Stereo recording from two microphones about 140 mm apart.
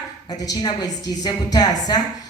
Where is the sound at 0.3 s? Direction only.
30° left (ahead or behind).